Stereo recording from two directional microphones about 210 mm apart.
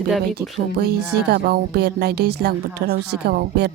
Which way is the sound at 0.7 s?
50° right (ahead or behind).